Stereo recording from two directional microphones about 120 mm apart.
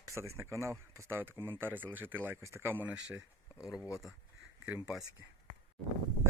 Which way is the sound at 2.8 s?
10° right (ahead or behind).